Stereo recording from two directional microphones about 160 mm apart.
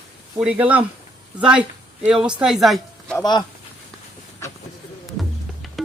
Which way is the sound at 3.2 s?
25° left (ahead or behind).